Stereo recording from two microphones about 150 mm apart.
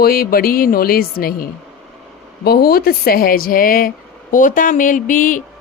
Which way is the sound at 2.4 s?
90° left.